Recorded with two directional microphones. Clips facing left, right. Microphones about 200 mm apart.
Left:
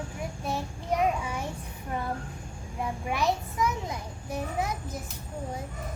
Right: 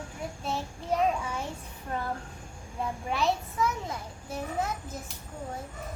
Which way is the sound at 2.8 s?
15° left (ahead or behind).